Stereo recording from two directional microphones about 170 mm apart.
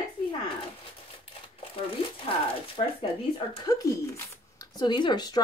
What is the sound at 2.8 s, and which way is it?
Speech, 35° left (ahead or behind).